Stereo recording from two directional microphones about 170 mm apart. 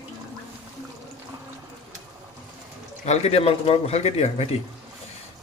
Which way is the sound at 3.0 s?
40° left (ahead or behind).